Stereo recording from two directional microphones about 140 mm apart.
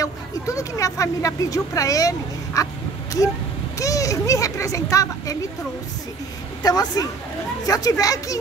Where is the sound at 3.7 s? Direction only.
25° left (ahead or behind).